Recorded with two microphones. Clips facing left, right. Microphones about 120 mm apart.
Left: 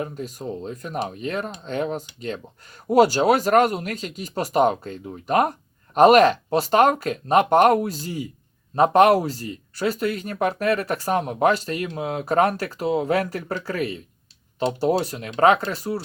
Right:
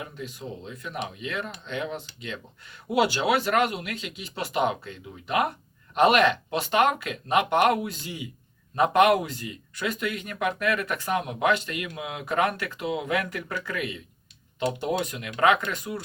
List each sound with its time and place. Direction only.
0.0 s speech: 40° left (ahead or behind)